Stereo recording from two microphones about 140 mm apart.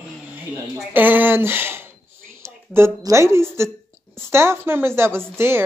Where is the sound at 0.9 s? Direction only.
15° right (ahead or behind).